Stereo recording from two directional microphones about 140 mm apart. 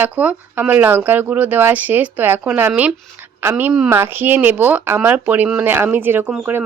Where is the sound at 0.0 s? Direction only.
10° right (ahead or behind).